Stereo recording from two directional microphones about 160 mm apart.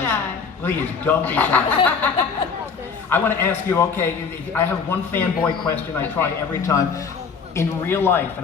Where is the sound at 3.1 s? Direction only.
15° left (ahead or behind).